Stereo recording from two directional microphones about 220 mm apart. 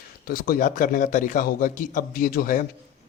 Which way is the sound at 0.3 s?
40° left (ahead or behind).